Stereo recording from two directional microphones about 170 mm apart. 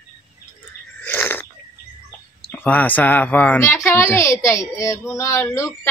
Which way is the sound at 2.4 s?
10° left (ahead or behind).